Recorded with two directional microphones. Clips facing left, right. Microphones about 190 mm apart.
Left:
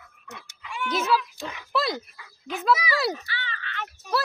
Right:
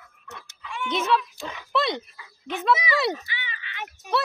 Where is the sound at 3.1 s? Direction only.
15° right (ahead or behind).